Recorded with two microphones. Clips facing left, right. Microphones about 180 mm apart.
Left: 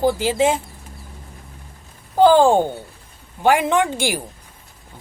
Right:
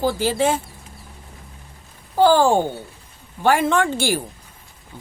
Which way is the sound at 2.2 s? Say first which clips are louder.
Left 2 dB; 20° left (ahead or behind).